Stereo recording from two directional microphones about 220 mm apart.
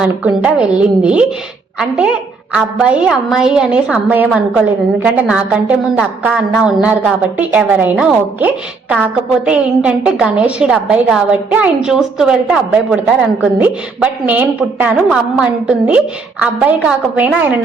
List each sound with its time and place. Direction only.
0.0 s a woman's voice: 5° right (ahead or behind)
2.5 s a woman's voice: 5° right (ahead or behind)